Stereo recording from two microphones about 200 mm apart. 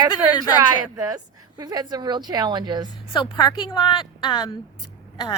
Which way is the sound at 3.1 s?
25° left (ahead or behind).